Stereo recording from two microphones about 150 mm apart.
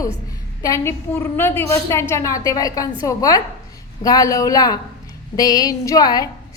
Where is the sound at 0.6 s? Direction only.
20° left (ahead or behind).